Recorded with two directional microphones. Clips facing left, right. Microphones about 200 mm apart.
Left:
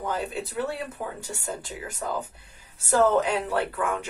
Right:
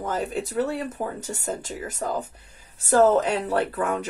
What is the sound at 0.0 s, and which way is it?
Speech, 40° right (ahead or behind).